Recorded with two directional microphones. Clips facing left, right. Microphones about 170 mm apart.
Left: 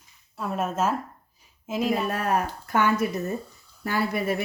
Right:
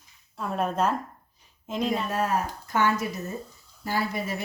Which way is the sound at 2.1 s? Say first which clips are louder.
Left 1 dB; 60° left (ahead or behind).